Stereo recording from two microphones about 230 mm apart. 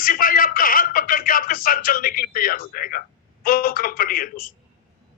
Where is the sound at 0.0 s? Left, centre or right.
Left.